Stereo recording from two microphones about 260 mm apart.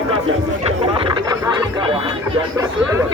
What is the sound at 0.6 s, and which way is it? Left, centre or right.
Speech, right.